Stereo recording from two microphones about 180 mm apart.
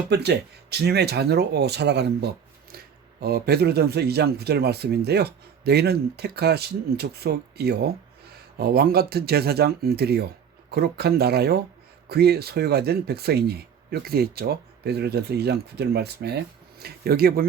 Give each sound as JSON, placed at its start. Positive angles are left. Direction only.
{"t": 0.1, "sound": "speech", "side_deg": -65}